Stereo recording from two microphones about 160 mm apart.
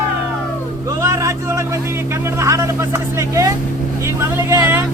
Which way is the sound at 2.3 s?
20° right (ahead or behind).